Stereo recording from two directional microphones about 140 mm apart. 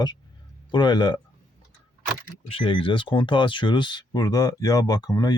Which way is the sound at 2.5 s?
40° left (ahead or behind).